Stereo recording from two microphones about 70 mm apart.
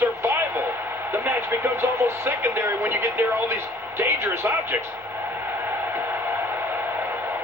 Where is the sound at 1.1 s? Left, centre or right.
Right.